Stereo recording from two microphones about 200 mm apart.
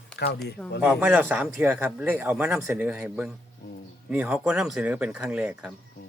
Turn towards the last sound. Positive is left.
turn(degrees=-5)  # may be behind; listen again after turning